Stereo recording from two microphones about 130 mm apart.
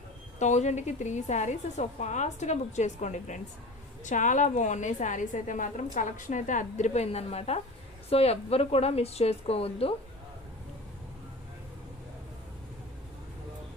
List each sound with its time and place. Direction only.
0.3 s a woman's voice: 65° left (ahead or behind); by 9.9 s 50° left (ahead or behind)